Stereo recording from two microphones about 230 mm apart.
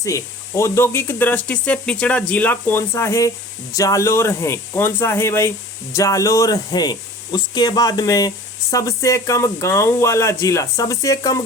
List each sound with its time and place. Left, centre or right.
0.0 s speech: centre